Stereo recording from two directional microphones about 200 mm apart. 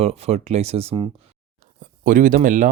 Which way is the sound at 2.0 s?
40° right (ahead or behind).